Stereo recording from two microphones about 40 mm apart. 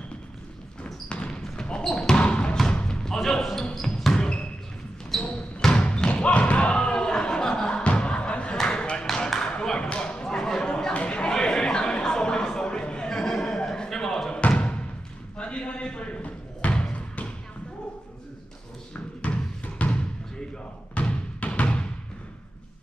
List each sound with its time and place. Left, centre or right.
1.0 s basketball bounce: left
1.8 s basketball bounce: centre
2.0 s basketball bounce: left
3.2 s basketball bounce: centre
5.8 s bouncing: left
6.2 s music: left
8.6 s a sound: left
11.3 s a sound: centre
14.3 s music: left
15.3 s basketball bounce: left
16.9 s a sound: left
19.2 s music: left
20.9 s music: left